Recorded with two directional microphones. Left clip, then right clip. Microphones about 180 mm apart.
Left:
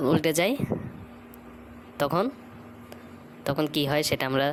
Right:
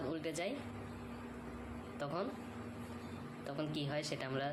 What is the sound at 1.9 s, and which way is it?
Speech, 50° left (ahead or behind).